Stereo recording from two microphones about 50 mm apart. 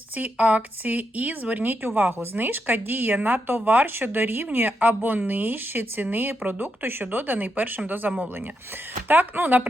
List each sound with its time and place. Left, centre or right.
0.2 s speech: right